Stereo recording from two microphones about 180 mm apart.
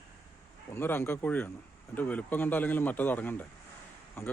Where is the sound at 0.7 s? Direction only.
10° left (ahead or behind).